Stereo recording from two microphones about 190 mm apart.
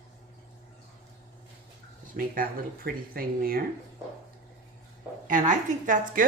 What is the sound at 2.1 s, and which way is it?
Speech, 50° right (ahead or behind).